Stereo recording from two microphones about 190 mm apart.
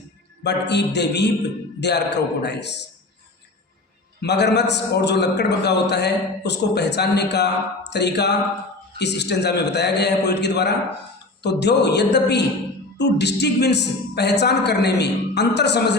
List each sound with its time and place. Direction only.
0.4 s a man's voice: 65° left (ahead or behind)
4.2 s a man's voice: 65° left (ahead or behind)